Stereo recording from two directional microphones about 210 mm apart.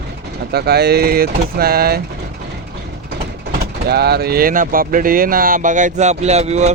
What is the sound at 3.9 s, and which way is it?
Speech, 50° right (ahead or behind).